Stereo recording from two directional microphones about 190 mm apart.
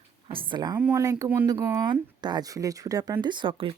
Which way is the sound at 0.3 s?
25° right (ahead or behind).